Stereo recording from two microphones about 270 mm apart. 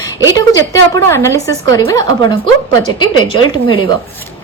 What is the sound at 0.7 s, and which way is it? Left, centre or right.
A woman's voice, centre.